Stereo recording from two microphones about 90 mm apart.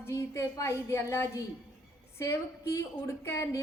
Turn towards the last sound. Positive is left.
turn(degrees=35)  # may be behind; listen again after turning